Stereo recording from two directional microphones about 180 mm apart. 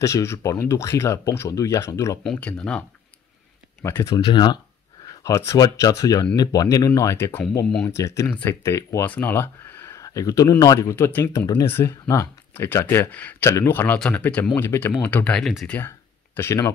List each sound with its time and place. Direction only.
0.0 s speech: 15° left (ahead or behind)
2.2 s speech: 5° left (ahead or behind)
3.8 s speech: 20° left (ahead or behind)
7.9 s speech: 15° left (ahead or behind)